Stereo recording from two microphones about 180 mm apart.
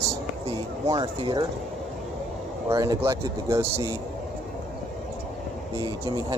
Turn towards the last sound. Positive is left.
turn(degrees=-25)  # may be behind; listen again after turning